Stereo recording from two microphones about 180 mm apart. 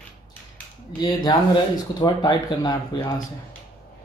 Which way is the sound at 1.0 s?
25° left (ahead or behind).